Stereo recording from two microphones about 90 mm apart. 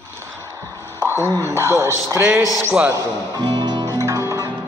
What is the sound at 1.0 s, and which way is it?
Speech, 30° right (ahead or behind).